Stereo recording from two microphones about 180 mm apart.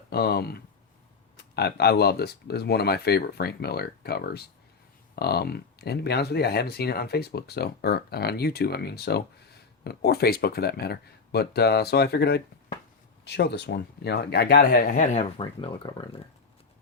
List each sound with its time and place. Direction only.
0.1 s speech: 60° left (ahead or behind); by 15.7 s 35° left (ahead or behind)